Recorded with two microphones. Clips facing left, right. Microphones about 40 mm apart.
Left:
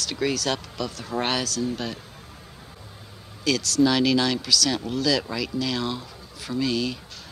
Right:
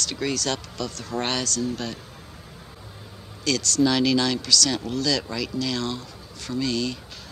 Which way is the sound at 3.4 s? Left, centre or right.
Centre.